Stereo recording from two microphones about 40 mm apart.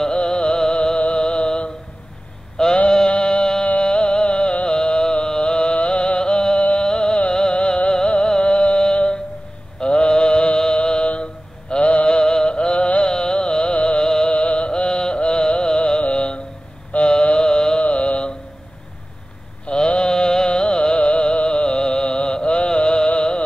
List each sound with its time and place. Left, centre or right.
0.1 s music: left
2.5 s sheep: centre
3.1 s music: left
9.8 s a sound: left
10.7 s music: left
13.1 s carnatic music: left
14.0 s music: centre
14.3 s music: left
17.0 s mantra: left
17.8 s mantra: left
19.6 s music: left